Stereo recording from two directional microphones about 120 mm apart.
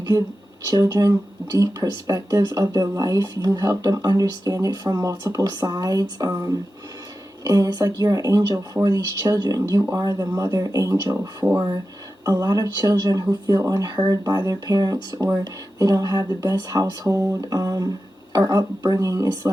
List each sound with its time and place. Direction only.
0.7 s speech: 30° right (ahead or behind)